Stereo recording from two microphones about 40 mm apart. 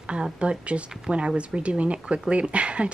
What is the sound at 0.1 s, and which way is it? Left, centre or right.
Speech, right.